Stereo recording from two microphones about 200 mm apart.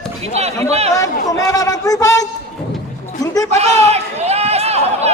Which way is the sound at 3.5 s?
30° right (ahead or behind).